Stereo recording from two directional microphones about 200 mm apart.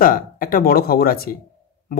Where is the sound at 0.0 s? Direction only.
45° left (ahead or behind).